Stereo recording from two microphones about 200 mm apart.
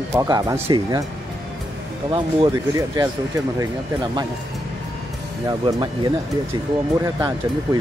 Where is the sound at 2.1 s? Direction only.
25° right (ahead or behind).